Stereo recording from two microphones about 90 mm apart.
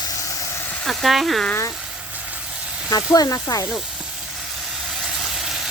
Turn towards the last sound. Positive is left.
turn(degrees=40)  # may be behind; listen again after turning